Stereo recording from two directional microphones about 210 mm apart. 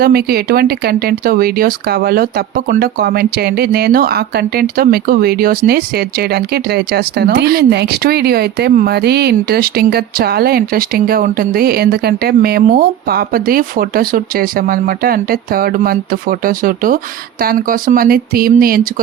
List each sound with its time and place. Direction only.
0.0 s speech: 45° right (ahead or behind)